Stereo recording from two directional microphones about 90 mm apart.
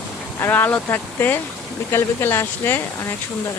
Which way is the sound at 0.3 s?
25° left (ahead or behind).